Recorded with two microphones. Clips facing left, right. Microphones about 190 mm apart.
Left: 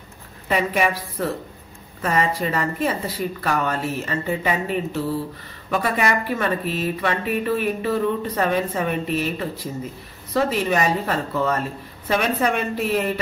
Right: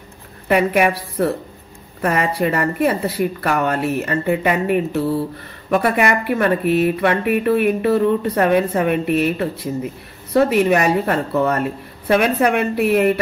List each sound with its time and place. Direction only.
0.5 s speech: 60° right (ahead or behind)
2.0 s speech: 60° right (ahead or behind)